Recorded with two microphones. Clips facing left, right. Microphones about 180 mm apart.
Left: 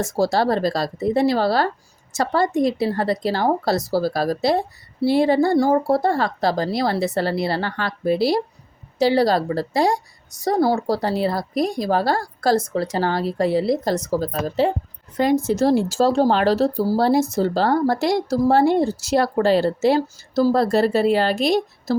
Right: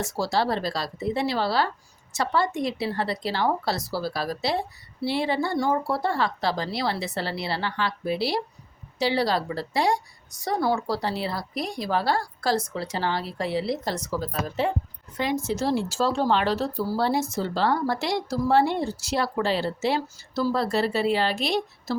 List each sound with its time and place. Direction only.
0.0 s speech: 45° left (ahead or behind)
15.2 s speech: 50° left (ahead or behind)